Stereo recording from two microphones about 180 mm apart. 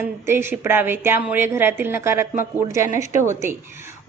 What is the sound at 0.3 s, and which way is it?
A woman's voice, 15° right (ahead or behind).